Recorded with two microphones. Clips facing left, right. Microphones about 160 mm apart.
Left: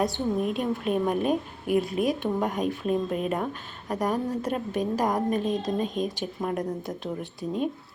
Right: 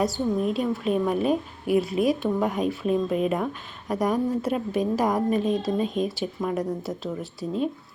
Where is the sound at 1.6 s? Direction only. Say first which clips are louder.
Right 3 dB; 45° left (ahead or behind).